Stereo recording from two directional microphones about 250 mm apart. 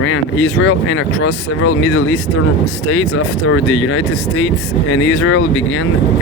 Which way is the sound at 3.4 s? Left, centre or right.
Left.